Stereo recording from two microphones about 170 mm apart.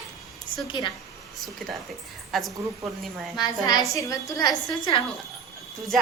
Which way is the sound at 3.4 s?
25° left (ahead or behind).